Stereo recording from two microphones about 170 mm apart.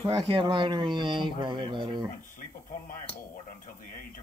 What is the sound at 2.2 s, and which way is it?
Radio, 55° left (ahead or behind).